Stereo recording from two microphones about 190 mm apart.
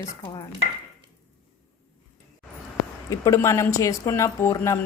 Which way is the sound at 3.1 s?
15° left (ahead or behind).